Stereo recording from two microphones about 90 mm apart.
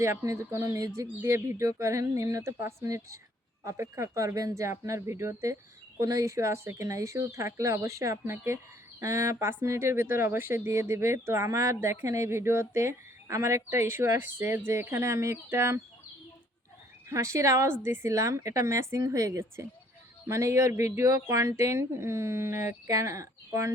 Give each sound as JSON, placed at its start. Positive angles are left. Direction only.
{"t": 0.0, "sound": "speech", "side_deg": -30}
{"t": 17.1, "sound": "speech", "side_deg": -35}